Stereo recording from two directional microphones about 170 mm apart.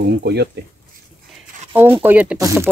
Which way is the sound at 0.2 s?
75° right (ahead or behind).